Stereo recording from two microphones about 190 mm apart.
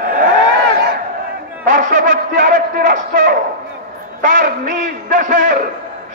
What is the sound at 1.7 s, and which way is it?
A man's voice, 40° right (ahead or behind).